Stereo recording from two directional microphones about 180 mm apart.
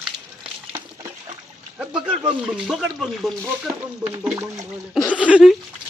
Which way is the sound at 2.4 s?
5° right (ahead or behind).